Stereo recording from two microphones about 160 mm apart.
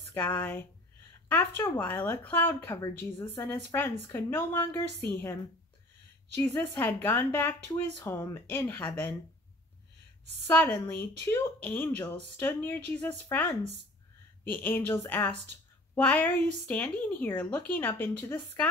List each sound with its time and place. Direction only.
0.1 s speech: 10° left (ahead or behind)
10.4 s speech: 10° left (ahead or behind)